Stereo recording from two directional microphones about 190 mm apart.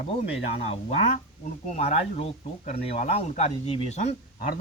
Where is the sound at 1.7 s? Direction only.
35° left (ahead or behind).